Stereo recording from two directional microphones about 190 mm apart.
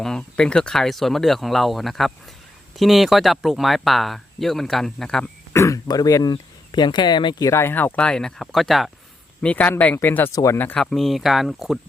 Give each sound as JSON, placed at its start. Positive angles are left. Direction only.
{"t": 0.0, "sound": "speech", "side_deg": 5}